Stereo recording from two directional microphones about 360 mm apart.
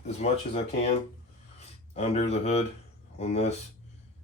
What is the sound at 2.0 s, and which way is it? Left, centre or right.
Speech, centre.